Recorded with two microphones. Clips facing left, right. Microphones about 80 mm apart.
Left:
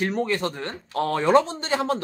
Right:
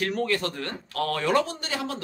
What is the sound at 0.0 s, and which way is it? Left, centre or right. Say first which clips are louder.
Speech: left 2 dB; left.